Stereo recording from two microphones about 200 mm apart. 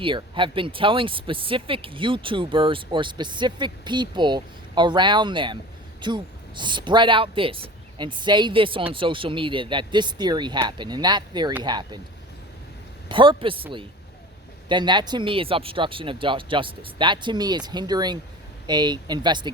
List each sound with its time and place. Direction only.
0.0 s speech: 25° right (ahead or behind)
13.1 s speech: 25° right (ahead or behind)